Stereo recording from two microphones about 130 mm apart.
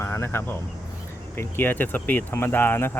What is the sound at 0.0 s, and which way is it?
Speech, 20° left (ahead or behind).